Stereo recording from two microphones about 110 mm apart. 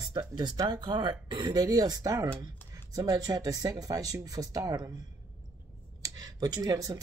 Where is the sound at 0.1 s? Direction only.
40° right (ahead or behind).